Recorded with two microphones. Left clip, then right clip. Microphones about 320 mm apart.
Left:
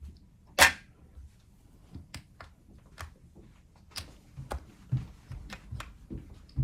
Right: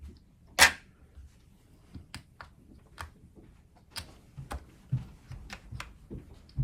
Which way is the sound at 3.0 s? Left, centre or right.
Centre.